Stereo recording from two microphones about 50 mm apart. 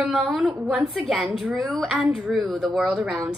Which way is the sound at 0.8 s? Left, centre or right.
Centre.